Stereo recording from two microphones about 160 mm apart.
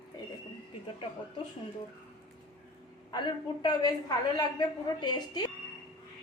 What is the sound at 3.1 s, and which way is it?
A woman's voice, 30° left (ahead or behind).